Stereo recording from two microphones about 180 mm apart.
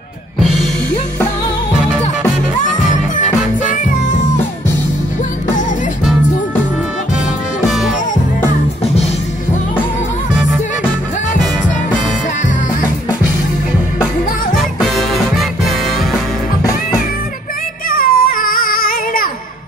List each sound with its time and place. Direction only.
7.6 s music: centre (ahead or behind)
14.6 s music: centre (ahead or behind)
17.8 s baby cry: 55° left (ahead or behind)